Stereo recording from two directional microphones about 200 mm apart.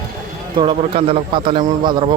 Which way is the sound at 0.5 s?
25° right (ahead or behind).